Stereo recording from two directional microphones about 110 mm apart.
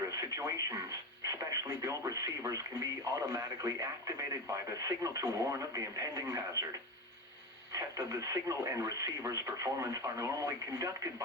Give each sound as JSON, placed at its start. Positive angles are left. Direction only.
{"t": 0.2, "sound": "speech", "side_deg": -30}
{"t": 7.7, "sound": "speech", "side_deg": -30}